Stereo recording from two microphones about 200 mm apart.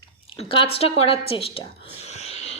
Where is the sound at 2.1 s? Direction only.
35° left (ahead or behind).